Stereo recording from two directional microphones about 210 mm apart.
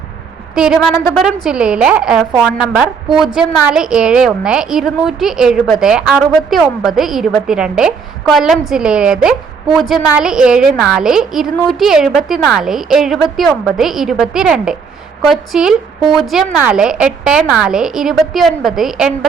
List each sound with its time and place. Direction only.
0.5 s a woman's voice: 5° right (ahead or behind)